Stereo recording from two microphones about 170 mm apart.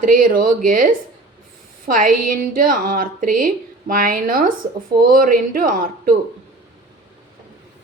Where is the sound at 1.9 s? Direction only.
55° right (ahead or behind).